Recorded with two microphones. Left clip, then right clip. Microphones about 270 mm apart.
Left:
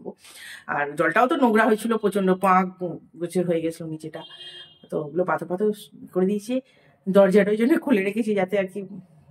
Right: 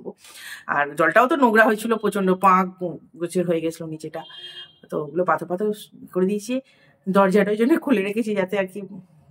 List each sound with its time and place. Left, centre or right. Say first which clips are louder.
0.7 s speech: right 3 dB; centre